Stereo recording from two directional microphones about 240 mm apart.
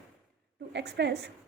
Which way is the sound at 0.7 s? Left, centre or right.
Right.